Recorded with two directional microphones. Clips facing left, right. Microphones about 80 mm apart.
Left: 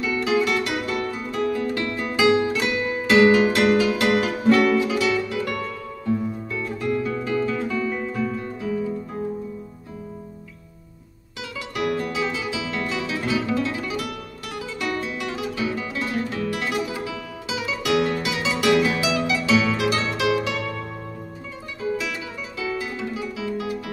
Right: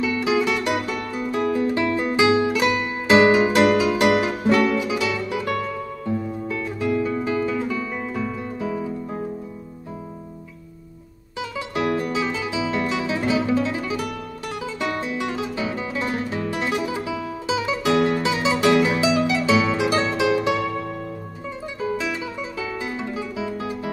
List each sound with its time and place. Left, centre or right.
0.0 s music: centre
2.2 s music: centre
3.1 s music: right
6.6 s music: centre
7.1 s guitar: centre
8.2 s music: right
11.3 s music: right
22.6 s music: right